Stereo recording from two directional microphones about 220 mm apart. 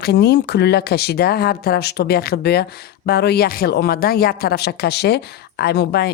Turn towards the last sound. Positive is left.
turn(degrees=45)  # may be behind; listen again after turning